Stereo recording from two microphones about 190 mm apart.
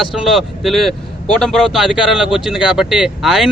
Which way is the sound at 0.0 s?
Centre (ahead or behind).